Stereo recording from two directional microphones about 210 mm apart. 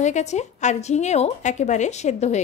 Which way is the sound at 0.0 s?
35° left (ahead or behind).